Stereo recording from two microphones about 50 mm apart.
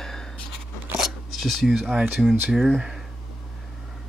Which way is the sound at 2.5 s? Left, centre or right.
Centre.